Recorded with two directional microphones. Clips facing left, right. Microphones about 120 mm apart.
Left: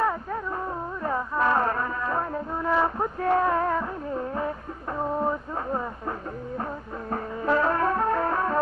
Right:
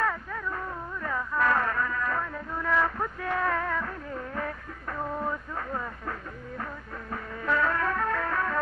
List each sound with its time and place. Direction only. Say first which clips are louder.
0.0 s music: left 4 dB; 25° left (ahead or behind)